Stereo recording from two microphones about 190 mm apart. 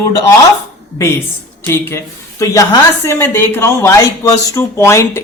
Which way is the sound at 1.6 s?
10° left (ahead or behind).